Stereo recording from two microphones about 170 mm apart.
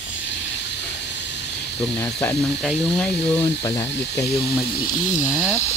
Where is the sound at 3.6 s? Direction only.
20° left (ahead or behind).